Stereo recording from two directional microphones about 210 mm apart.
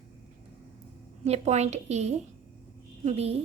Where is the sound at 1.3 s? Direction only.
30° right (ahead or behind).